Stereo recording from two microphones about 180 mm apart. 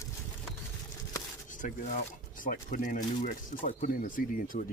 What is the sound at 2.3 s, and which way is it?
Speech, 50° left (ahead or behind).